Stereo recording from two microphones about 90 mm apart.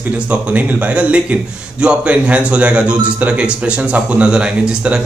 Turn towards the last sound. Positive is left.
turn(degrees=-10)  # may be behind; listen again after turning